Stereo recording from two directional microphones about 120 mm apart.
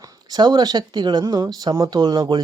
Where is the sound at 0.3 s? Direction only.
35° right (ahead or behind).